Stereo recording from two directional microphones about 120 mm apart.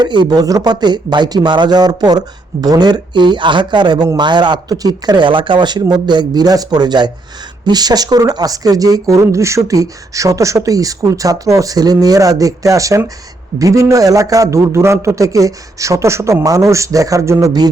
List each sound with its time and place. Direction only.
0.0 s speech: 35° right (ahead or behind)